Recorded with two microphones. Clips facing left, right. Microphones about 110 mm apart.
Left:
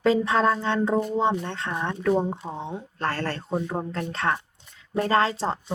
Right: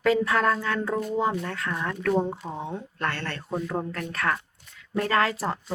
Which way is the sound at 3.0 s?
35° left (ahead or behind).